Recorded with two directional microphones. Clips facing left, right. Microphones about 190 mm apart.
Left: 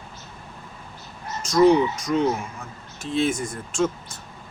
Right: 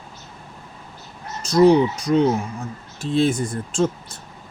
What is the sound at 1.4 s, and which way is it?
Speech, 35° right (ahead or behind).